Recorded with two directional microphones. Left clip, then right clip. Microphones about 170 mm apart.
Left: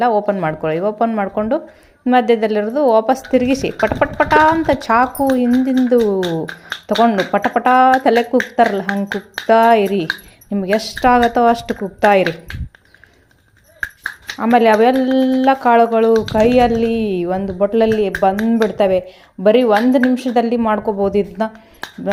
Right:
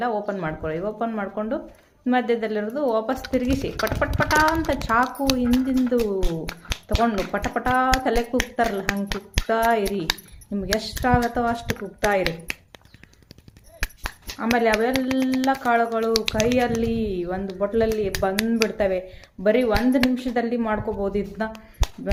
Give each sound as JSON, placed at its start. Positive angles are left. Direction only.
{"t": 0.0, "sound": "speech", "side_deg": 40}
{"t": 14.3, "sound": "speech", "side_deg": 40}